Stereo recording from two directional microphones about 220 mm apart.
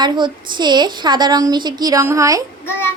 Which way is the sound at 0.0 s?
20° right (ahead or behind).